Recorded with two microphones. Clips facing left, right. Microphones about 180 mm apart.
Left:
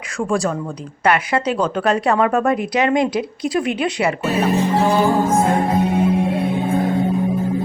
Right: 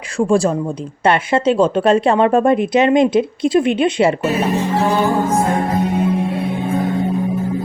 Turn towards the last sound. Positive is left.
turn(degrees=25)  # may be behind; listen again after turning